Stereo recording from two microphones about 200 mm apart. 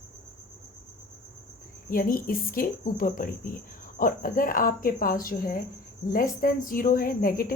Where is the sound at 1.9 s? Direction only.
45° left (ahead or behind).